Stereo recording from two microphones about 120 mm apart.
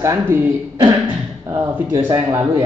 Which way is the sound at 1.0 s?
20° right (ahead or behind).